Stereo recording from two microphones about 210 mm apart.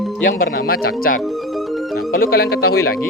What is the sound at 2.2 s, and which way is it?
Speech, 45° left (ahead or behind).